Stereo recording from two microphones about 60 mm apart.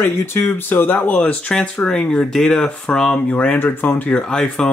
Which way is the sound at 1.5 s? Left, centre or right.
Centre.